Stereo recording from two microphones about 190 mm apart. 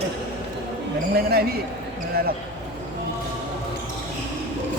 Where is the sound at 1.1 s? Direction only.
55° right (ahead or behind).